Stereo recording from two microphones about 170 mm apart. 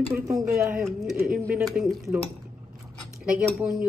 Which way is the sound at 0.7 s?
Centre (ahead or behind).